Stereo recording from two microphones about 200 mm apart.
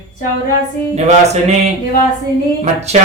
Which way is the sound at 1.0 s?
35° right (ahead or behind).